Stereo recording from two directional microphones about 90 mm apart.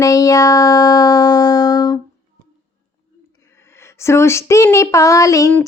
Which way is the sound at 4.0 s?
30° left (ahead or behind).